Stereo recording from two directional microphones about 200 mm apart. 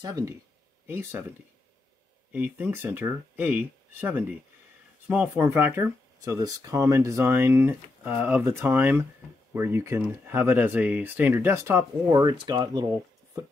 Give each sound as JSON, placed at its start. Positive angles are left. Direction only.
{"t": 0.0, "sound": "speech", "side_deg": -20}
{"t": 2.3, "sound": "speech", "side_deg": -10}